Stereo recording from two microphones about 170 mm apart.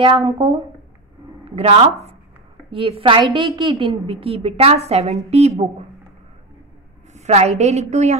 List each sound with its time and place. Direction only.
0.0 s a woman's voice: 30° right (ahead or behind)
7.2 s a woman's voice: 40° right (ahead or behind)